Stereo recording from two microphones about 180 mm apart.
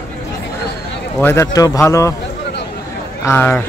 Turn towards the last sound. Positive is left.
turn(degrees=10)  # may be behind; listen again after turning